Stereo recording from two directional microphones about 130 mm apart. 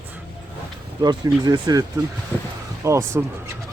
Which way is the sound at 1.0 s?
30° right (ahead or behind).